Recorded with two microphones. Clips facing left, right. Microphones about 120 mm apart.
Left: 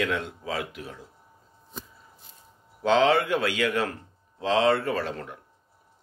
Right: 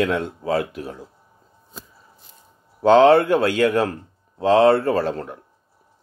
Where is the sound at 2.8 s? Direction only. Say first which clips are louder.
Right 8 dB; 45° right (ahead or behind).